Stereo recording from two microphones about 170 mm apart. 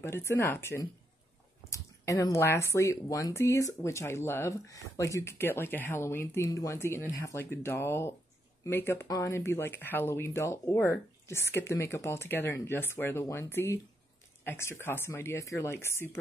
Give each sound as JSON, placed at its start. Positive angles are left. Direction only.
{"t": 0.0, "sound": "speech", "side_deg": 15}